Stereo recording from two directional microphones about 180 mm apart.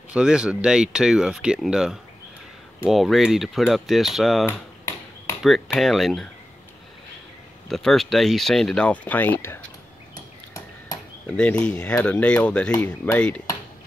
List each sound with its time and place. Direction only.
0.1 s speech: 5° right (ahead or behind)
7.7 s speech: centre (ahead or behind)
10.1 s a sound: 20° left (ahead or behind)
11.2 s speech: 5° left (ahead or behind)